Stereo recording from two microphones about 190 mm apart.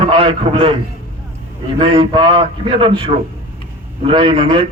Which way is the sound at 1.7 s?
30° right (ahead or behind).